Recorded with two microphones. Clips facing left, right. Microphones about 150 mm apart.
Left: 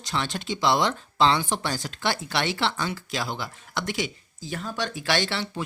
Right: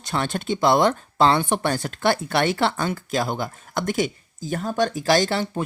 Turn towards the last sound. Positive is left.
turn(degrees=-45)  # may be behind; listen again after turning